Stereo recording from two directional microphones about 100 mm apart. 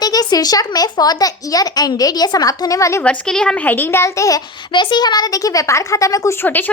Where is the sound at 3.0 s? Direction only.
10° left (ahead or behind); by 4.4 s 35° left (ahead or behind).